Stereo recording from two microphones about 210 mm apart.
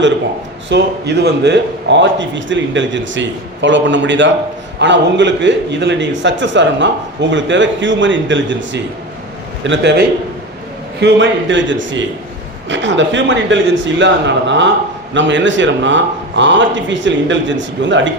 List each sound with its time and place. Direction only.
0.7 s a man's voice: 55° right (ahead or behind)
11.0 s a man's voice: 60° right (ahead or behind)